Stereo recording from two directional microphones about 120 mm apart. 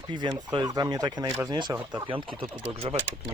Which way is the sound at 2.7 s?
50° right (ahead or behind).